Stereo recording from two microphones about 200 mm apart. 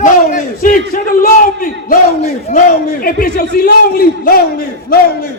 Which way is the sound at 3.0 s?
50° left (ahead or behind).